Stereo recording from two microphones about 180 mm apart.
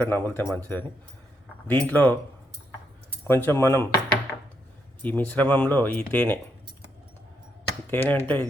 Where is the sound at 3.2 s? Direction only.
10° left (ahead or behind).